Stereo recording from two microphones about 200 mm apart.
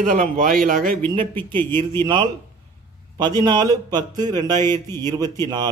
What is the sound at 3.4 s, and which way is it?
A man's voice, 20° right (ahead or behind).